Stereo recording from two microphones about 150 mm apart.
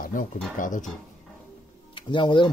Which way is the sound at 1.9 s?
30° left (ahead or behind).